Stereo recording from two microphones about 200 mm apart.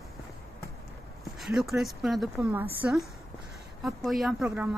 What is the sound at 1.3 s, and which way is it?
Speech, centre (ahead or behind).